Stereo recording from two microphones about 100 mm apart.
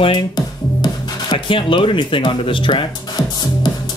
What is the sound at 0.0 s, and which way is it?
Speech, 50° left (ahead or behind).